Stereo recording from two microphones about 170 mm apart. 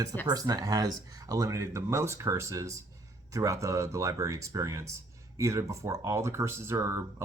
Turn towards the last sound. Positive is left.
turn(degrees=-15)  # may be behind; listen again after turning